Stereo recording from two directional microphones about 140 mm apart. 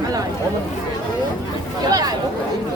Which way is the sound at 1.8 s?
30° right (ahead or behind).